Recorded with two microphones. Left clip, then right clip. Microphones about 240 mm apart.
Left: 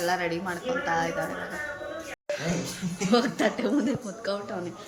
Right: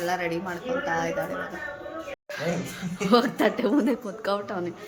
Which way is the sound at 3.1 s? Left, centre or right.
Centre.